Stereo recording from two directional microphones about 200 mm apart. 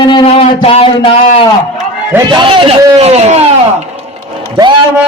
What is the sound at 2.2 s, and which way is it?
A man's voice, 25° right (ahead or behind).